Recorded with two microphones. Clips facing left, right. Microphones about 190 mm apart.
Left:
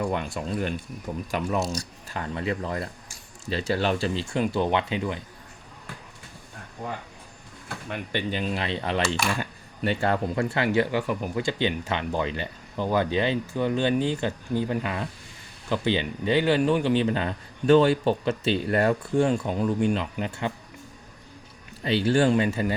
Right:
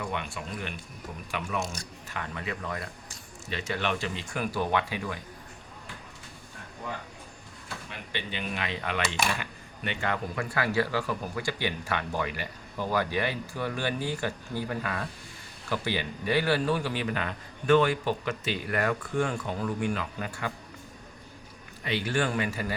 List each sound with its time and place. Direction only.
0.0 s speech: 40° left (ahead or behind); by 5.2 s 20° left (ahead or behind)
7.9 s speech: 45° left (ahead or behind); by 20.5 s 25° left (ahead or behind)
21.8 s speech: 30° left (ahead or behind)